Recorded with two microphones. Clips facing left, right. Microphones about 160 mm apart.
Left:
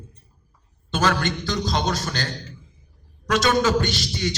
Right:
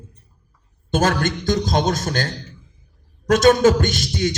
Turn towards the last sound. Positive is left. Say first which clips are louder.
# right 5 dB
turn(degrees=-50)  # may be behind; listen again after turning